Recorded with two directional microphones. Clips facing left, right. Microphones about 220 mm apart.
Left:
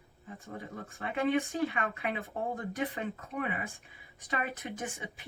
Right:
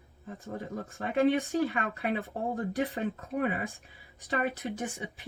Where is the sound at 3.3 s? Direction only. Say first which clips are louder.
Right 6 dB; 45° right (ahead or behind).